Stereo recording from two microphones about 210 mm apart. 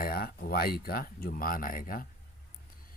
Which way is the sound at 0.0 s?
45° left (ahead or behind).